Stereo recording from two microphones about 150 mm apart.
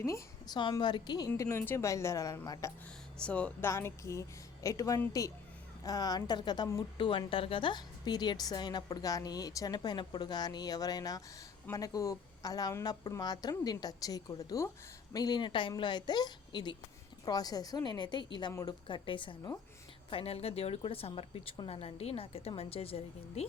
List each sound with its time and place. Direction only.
0.0 s a woman's voice: 25° left (ahead or behind)
1.3 s a woman's voice: 15° left (ahead or behind)
3.2 s a woman's voice: 10° left (ahead or behind); by 23.5 s 40° left (ahead or behind)